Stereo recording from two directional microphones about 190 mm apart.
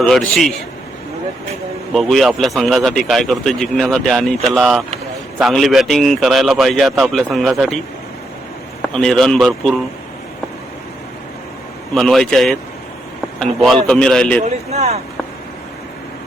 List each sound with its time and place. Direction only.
0.0 s a man's voice: centre (ahead or behind)
1.9 s a man's voice: centre (ahead or behind)
8.9 s a man's voice: 5° left (ahead or behind)
11.9 s a man's voice: centre (ahead or behind)
14.7 s speech: 35° right (ahead or behind)